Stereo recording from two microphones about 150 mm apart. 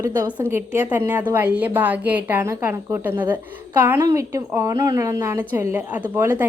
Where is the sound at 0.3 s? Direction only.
10° right (ahead or behind).